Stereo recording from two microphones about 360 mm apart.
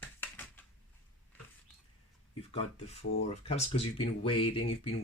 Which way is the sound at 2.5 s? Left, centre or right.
Centre.